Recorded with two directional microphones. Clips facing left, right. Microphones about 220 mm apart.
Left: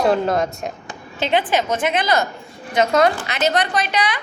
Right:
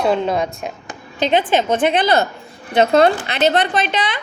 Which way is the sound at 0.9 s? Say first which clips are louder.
Right 3 dB; 20° right (ahead or behind).